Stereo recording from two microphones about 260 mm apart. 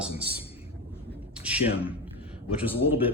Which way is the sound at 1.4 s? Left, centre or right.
Centre.